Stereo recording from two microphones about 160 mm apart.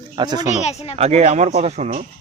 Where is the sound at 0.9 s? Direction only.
40° right (ahead or behind).